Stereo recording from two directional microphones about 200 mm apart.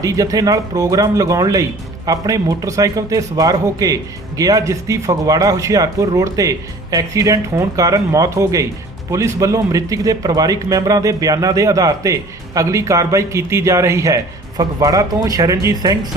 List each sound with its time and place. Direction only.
0.0 s speech: 15° right (ahead or behind)